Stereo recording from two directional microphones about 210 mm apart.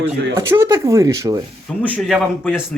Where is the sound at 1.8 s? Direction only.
5° left (ahead or behind).